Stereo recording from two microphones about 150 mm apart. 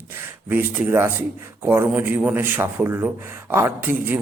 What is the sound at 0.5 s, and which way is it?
A man's voice, 15° right (ahead or behind).